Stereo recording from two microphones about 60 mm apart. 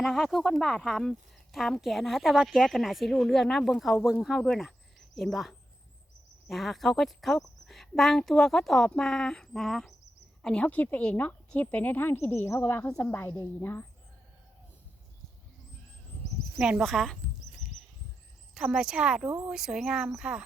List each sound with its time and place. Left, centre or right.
0.0 s speech: centre
10.4 s speech: centre
10.7 s a woman's voice: left
16.6 s speech: centre
16.8 s speech: centre
18.5 s speech: centre